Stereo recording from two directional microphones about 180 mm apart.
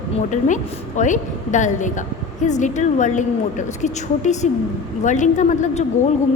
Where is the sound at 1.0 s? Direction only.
45° left (ahead or behind).